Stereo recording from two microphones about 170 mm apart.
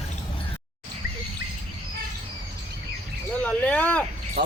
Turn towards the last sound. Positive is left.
turn(degrees=-70)  # may be behind; listen again after turning